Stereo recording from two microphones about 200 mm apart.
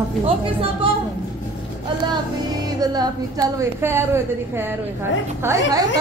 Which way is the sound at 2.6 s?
20° right (ahead or behind).